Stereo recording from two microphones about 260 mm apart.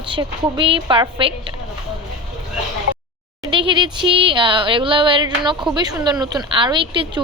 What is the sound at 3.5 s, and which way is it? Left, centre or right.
A woman's voice, centre.